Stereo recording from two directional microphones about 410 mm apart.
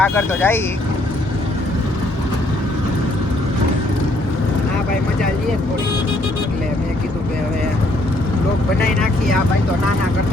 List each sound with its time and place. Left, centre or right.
0.0 s speech: centre